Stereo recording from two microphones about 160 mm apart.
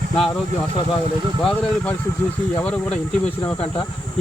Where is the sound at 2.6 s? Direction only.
5° left (ahead or behind).